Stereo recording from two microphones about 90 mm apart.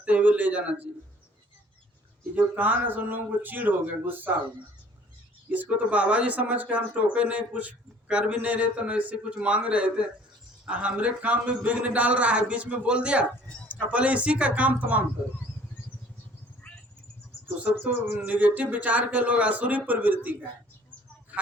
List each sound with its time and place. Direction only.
0.0 s a sound: 15° right (ahead or behind)
2.3 s speech: 20° right (ahead or behind)
5.5 s speech: 20° right (ahead or behind)
17.6 s speech: 20° right (ahead or behind)